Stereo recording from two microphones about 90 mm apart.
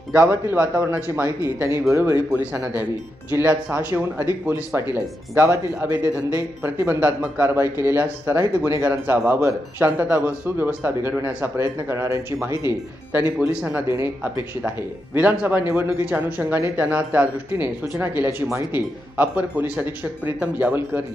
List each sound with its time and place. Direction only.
0.6 s a man's voice: 15° right (ahead or behind)
2.3 s a man's voice: 15° right (ahead or behind)
6.6 s a man's voice: 25° right (ahead or behind)
13.4 s speech: 5° right (ahead or behind)
13.7 s a man's voice: 25° right (ahead or behind)